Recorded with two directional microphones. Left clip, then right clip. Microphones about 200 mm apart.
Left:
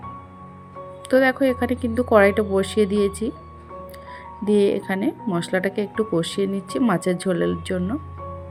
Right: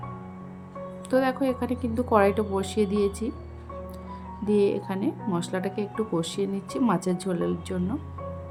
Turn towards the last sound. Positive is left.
turn(degrees=15)  # may be behind; listen again after turning